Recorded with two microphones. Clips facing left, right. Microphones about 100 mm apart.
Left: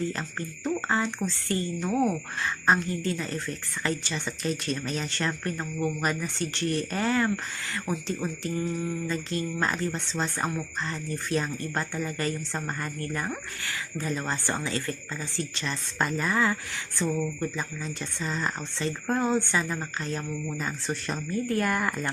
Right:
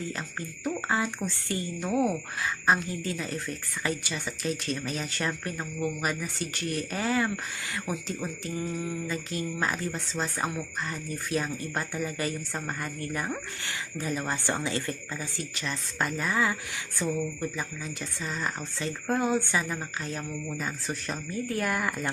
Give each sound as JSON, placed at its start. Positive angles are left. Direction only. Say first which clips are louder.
{"t": 0.2, "sound": "speech", "louder": "left 2 dB", "side_deg": -5}
{"t": 15.5, "sound": "speech", "louder": "even", "side_deg": 0}